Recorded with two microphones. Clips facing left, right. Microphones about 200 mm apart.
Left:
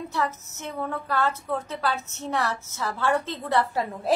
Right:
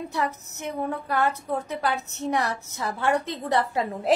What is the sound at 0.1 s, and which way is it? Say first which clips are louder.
A woman's voice: even; 15° right (ahead or behind).